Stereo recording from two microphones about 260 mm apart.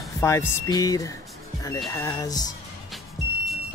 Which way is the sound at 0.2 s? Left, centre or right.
Centre.